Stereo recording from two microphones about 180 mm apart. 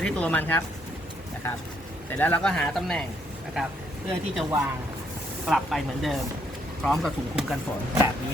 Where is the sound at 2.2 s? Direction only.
10° left (ahead or behind).